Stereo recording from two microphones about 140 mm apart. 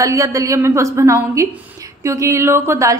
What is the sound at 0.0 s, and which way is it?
A woman's voice, 20° right (ahead or behind).